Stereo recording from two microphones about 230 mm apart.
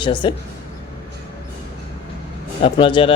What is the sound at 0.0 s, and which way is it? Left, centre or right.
Speech, left.